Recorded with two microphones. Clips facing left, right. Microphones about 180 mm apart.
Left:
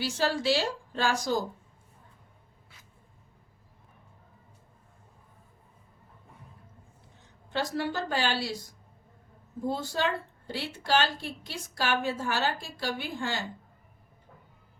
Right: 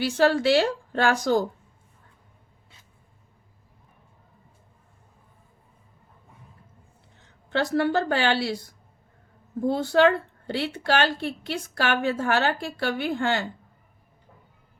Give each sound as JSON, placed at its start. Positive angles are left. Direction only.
{"t": 0.0, "sound": "a woman's voice", "side_deg": -60}
{"t": 7.2, "sound": "a woman's voice", "side_deg": -65}